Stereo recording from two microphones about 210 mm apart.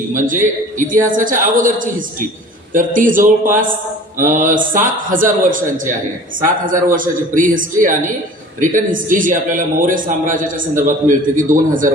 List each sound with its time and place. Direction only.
0.1 s a man's voice: 40° right (ahead or behind)